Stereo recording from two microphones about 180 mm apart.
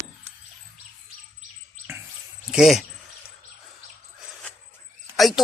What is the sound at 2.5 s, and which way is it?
Speech, centre (ahead or behind).